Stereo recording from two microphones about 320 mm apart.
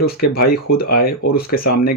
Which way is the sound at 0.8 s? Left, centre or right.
Left.